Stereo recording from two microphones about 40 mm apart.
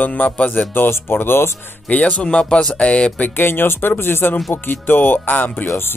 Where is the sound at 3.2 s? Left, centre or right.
Left.